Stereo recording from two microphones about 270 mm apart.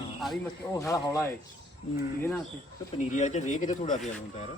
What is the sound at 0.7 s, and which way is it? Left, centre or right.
Speech, centre.